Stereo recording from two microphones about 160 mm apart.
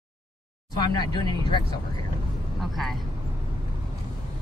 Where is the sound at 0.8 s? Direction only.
25° left (ahead or behind).